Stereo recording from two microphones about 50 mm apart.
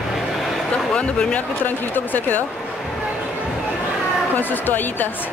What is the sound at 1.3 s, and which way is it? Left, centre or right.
Speech, left.